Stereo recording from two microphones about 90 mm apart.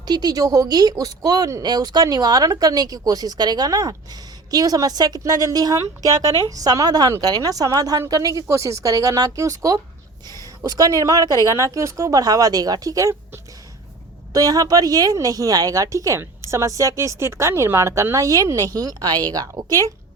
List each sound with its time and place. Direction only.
0.0 s a woman's voice: 50° right (ahead or behind)
10.4 s a sound: 40° right (ahead or behind)
11.0 s a woman's voice: 40° right (ahead or behind)
14.3 s a woman's voice: 45° right (ahead or behind)